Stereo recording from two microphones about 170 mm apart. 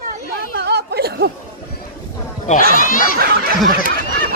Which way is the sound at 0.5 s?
75° right (ahead or behind).